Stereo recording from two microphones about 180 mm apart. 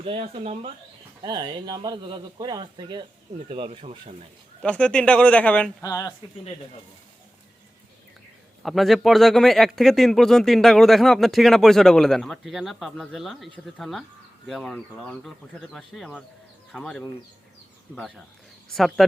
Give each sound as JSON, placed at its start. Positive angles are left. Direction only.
{"t": 0.0, "sound": "speech", "side_deg": -30}
{"t": 4.6, "sound": "speech", "side_deg": 5}
{"t": 5.8, "sound": "speech", "side_deg": 20}
{"t": 8.6, "sound": "speech", "side_deg": 0}